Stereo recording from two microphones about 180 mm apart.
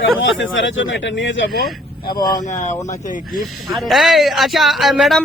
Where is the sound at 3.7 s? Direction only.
Centre (ahead or behind).